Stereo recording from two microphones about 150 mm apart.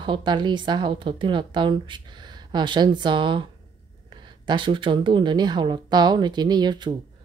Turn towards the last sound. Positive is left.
turn(degrees=-30)  # may be behind; listen again after turning